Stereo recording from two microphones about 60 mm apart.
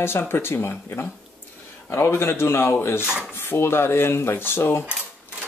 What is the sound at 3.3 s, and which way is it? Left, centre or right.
Speech, left.